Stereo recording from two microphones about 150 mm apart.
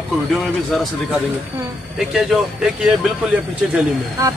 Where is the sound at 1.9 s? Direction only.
5° right (ahead or behind).